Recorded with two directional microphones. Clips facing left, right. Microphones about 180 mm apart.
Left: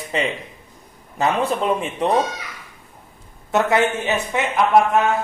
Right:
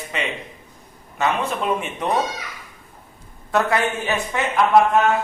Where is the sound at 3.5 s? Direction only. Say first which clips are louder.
Left 2 dB; 20° left (ahead or behind).